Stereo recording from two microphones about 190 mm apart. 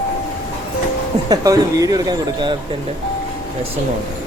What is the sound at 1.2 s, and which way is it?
Speech, 20° right (ahead or behind).